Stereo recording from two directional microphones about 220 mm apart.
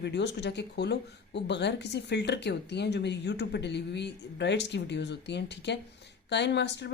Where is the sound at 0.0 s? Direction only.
50° left (ahead or behind).